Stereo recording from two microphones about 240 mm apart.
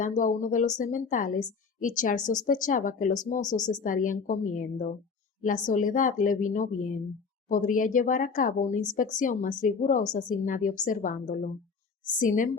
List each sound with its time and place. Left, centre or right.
0.0 s a woman's voice: left
3.4 s speech: centre
3.8 s a woman's voice: left